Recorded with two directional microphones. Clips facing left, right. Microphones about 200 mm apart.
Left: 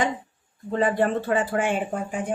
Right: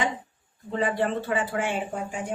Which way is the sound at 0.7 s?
45° left (ahead or behind).